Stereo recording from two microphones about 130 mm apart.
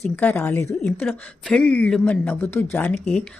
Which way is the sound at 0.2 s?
15° left (ahead or behind).